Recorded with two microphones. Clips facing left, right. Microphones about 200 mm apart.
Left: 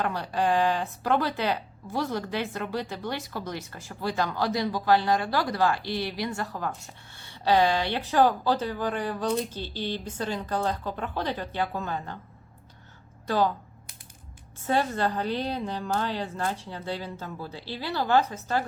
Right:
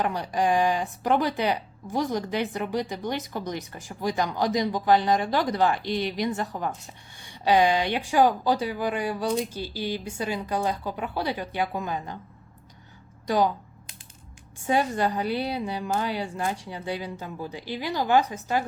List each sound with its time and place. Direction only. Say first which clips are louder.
0.0 s speech: right 2 dB; 15° right (ahead or behind)
13.2 s speech: right 2 dB; 15° right (ahead or behind)
14.7 s speech: right 2 dB; 15° right (ahead or behind)